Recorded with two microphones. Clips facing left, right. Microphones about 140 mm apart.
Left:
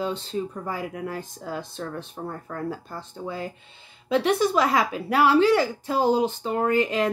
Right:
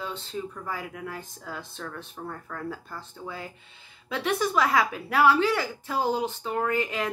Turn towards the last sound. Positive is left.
turn(degrees=30)  # may be behind; listen again after turning